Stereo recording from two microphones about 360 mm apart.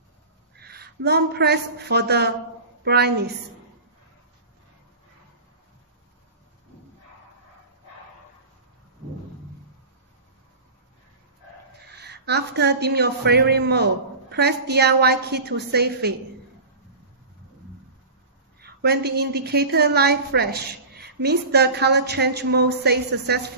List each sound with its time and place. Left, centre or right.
0.6 s a woman's voice: right
11.9 s a woman's voice: right
18.6 s a woman's voice: right